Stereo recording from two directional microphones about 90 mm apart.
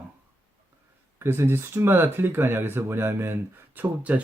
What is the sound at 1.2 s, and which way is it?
Speech, 25° right (ahead or behind).